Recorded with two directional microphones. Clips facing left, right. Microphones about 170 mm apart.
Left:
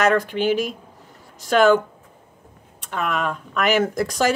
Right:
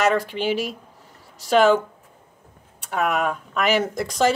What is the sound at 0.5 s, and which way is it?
Speech, 45° left (ahead or behind).